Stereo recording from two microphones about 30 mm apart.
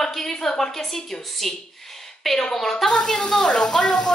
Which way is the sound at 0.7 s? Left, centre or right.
Centre.